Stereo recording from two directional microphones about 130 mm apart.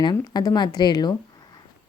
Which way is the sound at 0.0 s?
30° left (ahead or behind).